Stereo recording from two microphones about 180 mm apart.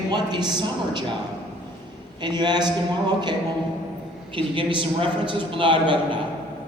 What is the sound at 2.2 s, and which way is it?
Speech, 25° right (ahead or behind).